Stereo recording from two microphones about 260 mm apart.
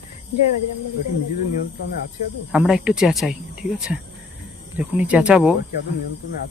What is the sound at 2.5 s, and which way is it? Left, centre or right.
Speech, centre.